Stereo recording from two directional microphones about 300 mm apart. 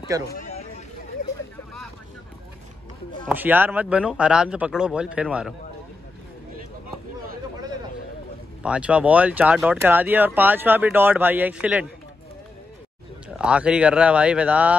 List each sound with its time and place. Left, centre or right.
0.4 s a sound: left
1.2 s vehicle: left
3.3 s speech: centre
8.6 s speech: centre
13.4 s speech: centre